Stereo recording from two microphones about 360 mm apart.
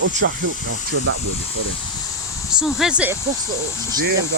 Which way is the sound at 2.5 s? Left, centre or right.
Centre.